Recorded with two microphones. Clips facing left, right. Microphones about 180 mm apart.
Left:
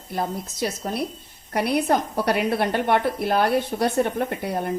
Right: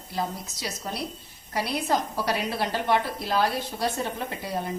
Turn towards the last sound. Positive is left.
turn(degrees=60)  # may be behind; listen again after turning